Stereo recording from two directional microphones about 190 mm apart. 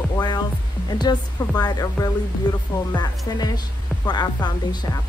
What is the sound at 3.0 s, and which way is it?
Speech, 20° left (ahead or behind).